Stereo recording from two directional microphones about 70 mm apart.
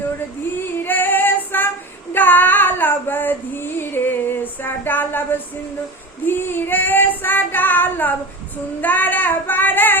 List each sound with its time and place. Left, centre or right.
0.6 s female singing: left
6.2 s child singing: left